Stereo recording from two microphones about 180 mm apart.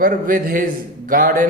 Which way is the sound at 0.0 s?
50° right (ahead or behind).